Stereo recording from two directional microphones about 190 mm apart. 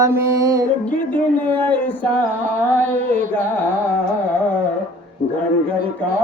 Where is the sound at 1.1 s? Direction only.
10° left (ahead or behind).